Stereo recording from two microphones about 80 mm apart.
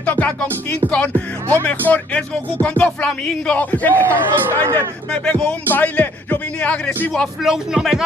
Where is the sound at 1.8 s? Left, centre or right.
Centre.